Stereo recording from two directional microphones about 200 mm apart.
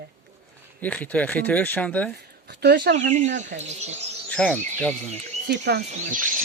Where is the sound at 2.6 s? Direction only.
55° right (ahead or behind).